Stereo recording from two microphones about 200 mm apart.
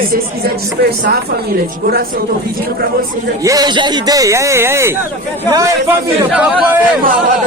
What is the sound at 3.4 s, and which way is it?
Speech, 20° right (ahead or behind).